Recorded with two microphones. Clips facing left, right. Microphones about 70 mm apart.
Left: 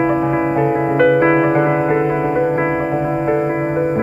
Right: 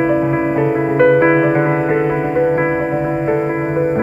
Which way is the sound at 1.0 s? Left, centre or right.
Centre.